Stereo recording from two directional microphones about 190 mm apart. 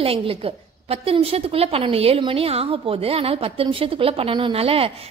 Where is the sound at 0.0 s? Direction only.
30° right (ahead or behind).